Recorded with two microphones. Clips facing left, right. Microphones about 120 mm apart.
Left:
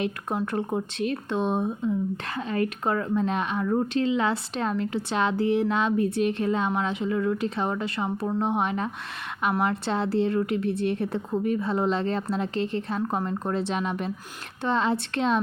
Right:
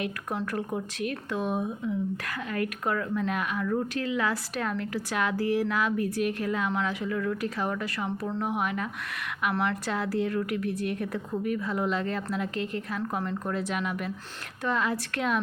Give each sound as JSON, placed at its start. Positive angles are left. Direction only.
{"t": 0.0, "sound": "speech", "side_deg": 25}